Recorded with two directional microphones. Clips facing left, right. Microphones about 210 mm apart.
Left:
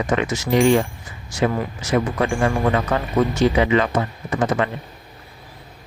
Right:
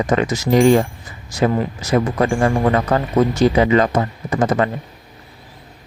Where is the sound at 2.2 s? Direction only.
35° right (ahead or behind).